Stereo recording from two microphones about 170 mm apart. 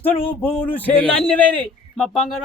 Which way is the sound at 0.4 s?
10° left (ahead or behind).